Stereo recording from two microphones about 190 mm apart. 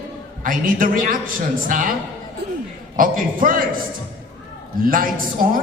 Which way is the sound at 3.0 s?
45° right (ahead or behind).